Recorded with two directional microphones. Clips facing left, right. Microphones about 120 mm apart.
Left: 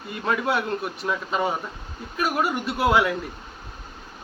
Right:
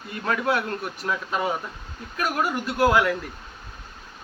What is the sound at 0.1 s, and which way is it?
A man's voice, centre (ahead or behind).